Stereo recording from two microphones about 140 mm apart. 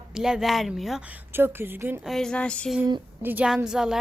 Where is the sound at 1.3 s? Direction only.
15° right (ahead or behind).